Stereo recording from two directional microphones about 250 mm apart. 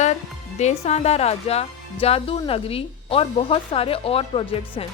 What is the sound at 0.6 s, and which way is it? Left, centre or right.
Speech, left.